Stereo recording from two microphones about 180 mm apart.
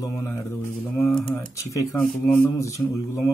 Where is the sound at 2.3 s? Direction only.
15° left (ahead or behind).